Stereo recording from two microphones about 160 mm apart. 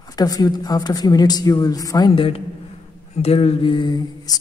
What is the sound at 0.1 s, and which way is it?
A man's voice, 25° left (ahead or behind).